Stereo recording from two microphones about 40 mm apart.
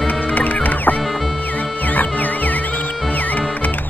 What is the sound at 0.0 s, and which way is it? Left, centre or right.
Music, left.